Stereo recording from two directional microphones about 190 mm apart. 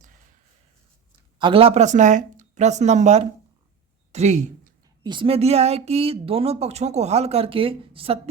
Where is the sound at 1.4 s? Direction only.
30° right (ahead or behind).